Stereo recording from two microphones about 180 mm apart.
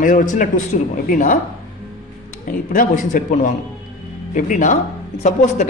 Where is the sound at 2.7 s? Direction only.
50° left (ahead or behind).